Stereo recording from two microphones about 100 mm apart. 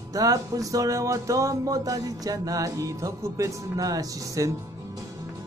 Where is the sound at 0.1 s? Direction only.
35° right (ahead or behind).